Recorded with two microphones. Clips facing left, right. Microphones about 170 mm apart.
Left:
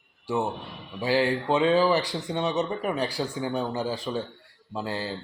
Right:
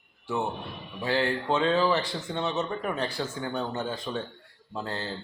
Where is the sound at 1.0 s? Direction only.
15° left (ahead or behind).